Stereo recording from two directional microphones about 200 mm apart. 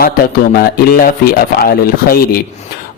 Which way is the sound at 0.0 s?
50° left (ahead or behind).